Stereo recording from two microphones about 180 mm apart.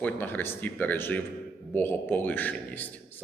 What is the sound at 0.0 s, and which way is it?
Speech, 10° left (ahead or behind).